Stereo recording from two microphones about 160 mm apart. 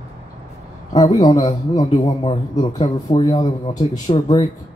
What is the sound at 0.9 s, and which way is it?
Speech, 25° left (ahead or behind).